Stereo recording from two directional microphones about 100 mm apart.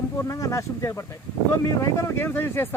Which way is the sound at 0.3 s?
35° left (ahead or behind).